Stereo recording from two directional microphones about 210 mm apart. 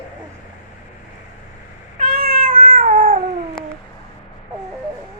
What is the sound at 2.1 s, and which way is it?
Cat, 45° right (ahead or behind).